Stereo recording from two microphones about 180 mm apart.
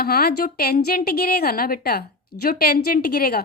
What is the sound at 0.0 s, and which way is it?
A woman's voice, 60° left (ahead or behind).